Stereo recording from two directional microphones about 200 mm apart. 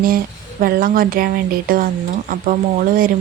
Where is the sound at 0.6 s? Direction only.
45° right (ahead or behind).